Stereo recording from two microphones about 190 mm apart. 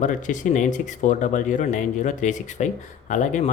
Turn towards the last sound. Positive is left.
turn(degrees=40)  # may be behind; listen again after turning